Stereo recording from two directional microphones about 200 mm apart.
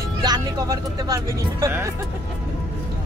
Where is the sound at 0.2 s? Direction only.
20° right (ahead or behind).